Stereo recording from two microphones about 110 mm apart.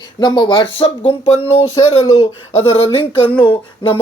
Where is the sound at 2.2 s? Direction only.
60° left (ahead or behind).